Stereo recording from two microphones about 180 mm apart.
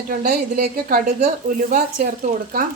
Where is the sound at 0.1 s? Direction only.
55° right (ahead or behind).